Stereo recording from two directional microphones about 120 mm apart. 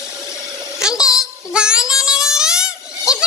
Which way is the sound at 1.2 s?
5° right (ahead or behind).